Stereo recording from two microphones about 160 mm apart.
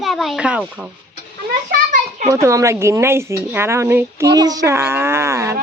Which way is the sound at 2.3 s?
20° right (ahead or behind).